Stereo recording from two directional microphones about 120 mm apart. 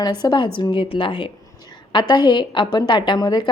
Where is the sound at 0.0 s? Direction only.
35° left (ahead or behind).